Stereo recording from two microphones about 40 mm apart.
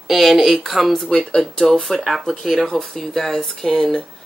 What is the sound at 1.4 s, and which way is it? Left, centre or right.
Speech, centre.